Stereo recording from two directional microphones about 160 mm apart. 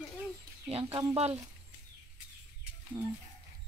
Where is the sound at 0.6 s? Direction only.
35° right (ahead or behind).